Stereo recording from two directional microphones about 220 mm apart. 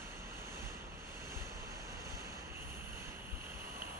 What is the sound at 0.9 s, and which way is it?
Vehicle, 10° right (ahead or behind).